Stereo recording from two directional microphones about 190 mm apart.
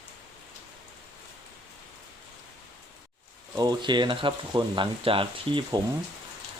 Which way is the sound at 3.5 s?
20° right (ahead or behind).